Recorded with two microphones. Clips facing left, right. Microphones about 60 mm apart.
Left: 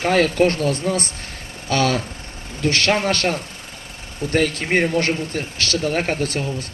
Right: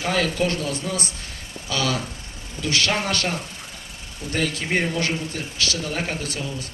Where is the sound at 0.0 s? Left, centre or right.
Left.